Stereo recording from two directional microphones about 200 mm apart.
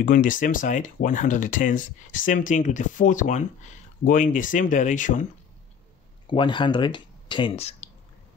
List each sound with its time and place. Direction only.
0.0 s speech: 40° left (ahead or behind)
6.2 s speech: 25° left (ahead or behind)